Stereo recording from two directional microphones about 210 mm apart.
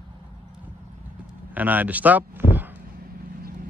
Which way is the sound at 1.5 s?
10° right (ahead or behind).